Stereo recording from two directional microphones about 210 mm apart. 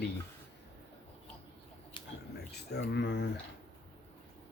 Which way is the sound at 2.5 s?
50° left (ahead or behind).